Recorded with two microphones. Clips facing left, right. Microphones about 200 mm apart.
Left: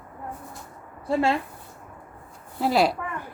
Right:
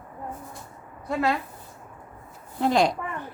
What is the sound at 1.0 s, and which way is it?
Speech, 30° left (ahead or behind).